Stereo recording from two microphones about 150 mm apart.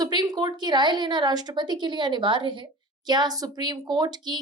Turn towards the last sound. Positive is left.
turn(degrees=-30)  # may be behind; listen again after turning